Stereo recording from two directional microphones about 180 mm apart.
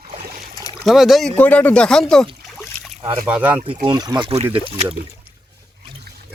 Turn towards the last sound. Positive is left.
turn(degrees=-35)  # may be behind; listen again after turning